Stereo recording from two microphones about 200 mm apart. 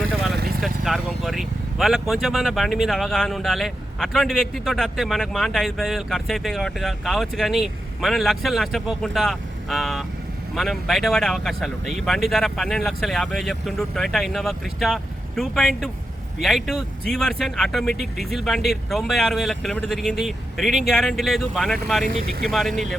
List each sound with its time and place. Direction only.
0.1 s vehicle: centre (ahead or behind)
0.3 s vehicle: 50° right (ahead or behind)
0.6 s speech: centre (ahead or behind)